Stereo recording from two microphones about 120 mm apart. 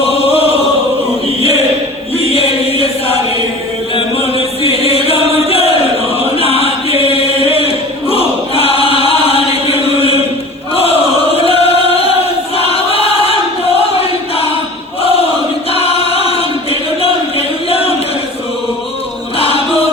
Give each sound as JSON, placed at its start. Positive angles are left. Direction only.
{"t": 0.0, "sound": "chant", "side_deg": 55}
{"t": 4.6, "sound": "chant", "side_deg": 55}
{"t": 12.5, "sound": "choir", "side_deg": 55}
{"t": 15.7, "sound": "choir", "side_deg": 55}
{"t": 17.7, "sound": "chant", "side_deg": 55}
{"t": 19.4, "sound": "music", "side_deg": 50}